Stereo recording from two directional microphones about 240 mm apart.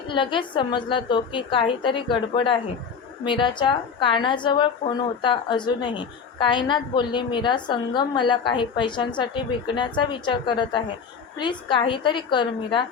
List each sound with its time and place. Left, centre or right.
0.1 s a woman's voice: left